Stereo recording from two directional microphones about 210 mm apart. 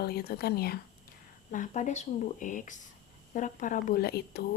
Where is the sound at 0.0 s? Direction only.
50° left (ahead or behind).